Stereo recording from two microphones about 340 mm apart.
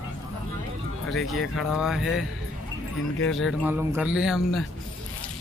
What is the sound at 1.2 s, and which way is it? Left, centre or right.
Speech, left.